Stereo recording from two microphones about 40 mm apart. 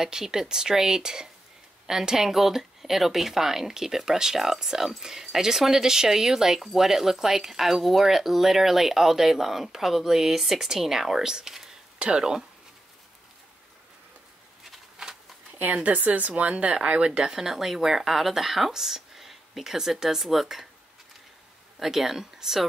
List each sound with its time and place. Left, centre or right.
0.0 s speech: centre
15.0 s a sound: centre
15.6 s speech: right
17.3 s speech: centre
21.7 s speech: centre